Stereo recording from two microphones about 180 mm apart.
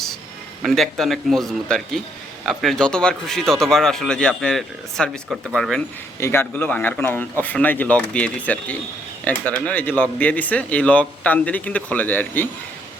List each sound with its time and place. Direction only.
0.6 s speech: centre (ahead or behind)
6.1 s speech: 15° left (ahead or behind)